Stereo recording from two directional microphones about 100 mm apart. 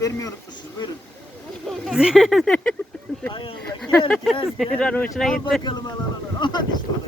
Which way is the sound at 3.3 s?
55° left (ahead or behind).